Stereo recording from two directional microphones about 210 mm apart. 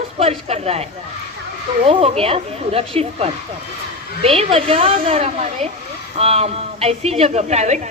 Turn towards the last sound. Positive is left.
turn(degrees=-35)  # may be behind; listen again after turning